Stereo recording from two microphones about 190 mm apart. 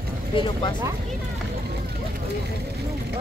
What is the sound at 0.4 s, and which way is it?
Speech, 25° left (ahead or behind).